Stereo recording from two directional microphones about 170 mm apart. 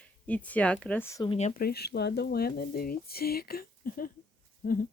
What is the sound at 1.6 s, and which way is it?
Speech, 70° left (ahead or behind).